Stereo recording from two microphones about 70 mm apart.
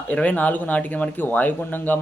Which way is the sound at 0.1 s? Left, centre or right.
Left.